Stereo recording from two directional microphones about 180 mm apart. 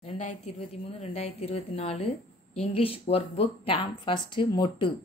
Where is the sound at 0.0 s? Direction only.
40° left (ahead or behind).